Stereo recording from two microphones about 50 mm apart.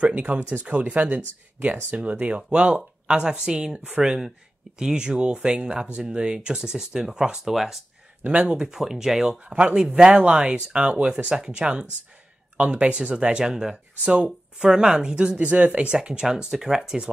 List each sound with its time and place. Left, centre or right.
0.1 s speech: right
3.1 s speech: centre
8.2 s speech: right; by 9.4 s centre
9.4 s speech: right
15.3 s speech: right